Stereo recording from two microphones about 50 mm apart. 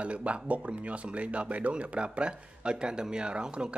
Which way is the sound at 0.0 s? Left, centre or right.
Right.